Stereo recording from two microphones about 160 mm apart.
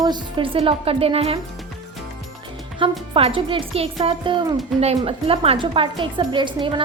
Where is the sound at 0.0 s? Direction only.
30° right (ahead or behind).